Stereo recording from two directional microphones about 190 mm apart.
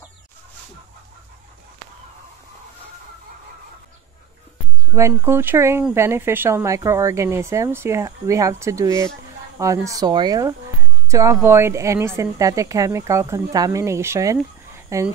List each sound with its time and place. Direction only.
4.9 s speech: 15° right (ahead or behind)